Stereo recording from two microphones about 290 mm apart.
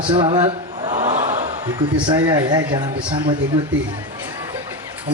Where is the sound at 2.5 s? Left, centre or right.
Centre.